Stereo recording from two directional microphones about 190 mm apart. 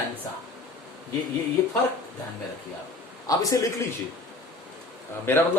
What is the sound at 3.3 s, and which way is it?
Speech, 20° left (ahead or behind).